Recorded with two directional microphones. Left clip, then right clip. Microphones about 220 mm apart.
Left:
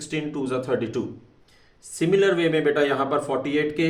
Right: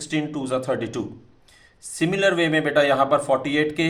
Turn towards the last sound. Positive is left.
turn(degrees=-35)  # may be behind; listen again after turning